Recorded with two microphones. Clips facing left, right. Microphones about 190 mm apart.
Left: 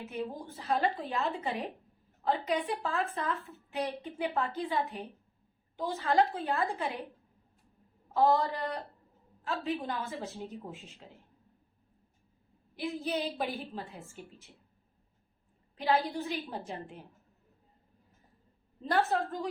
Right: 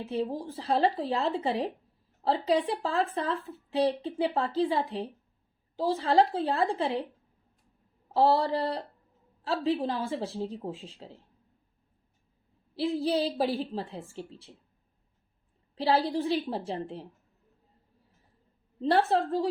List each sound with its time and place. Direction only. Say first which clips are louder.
0.0 s a woman's voice: right 6 dB; 30° right (ahead or behind)
8.1 s a woman's voice: right 3 dB; 30° right (ahead or behind)
12.7 s a woman's voice: right 7 dB; 30° right (ahead or behind)
15.7 s a woman's voice: right 4 dB; 30° right (ahead or behind)
18.8 s a woman's voice: right 5 dB; 30° right (ahead or behind)